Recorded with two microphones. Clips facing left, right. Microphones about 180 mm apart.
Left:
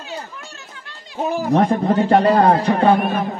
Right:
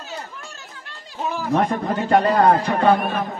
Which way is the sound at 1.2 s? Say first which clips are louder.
Left 4 dB; 45° left (ahead or behind).